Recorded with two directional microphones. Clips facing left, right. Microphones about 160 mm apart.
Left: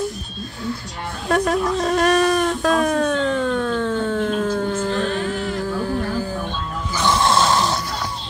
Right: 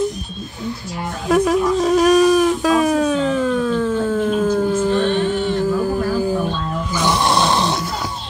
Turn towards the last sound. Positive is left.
turn(degrees=-20)  # may be behind; listen again after turning